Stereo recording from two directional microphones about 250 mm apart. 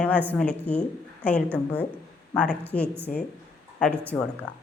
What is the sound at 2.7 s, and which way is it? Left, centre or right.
Speech, left.